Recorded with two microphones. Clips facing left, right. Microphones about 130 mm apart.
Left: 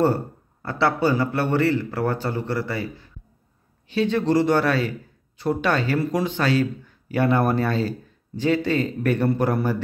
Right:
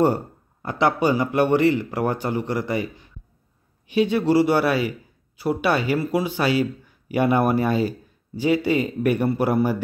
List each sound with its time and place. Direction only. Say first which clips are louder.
0.0 s a man's voice: right 1 dB; 15° right (ahead or behind)